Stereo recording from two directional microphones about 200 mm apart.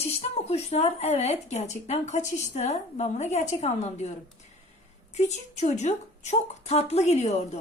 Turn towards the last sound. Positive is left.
turn(degrees=35)  # may be behind; listen again after turning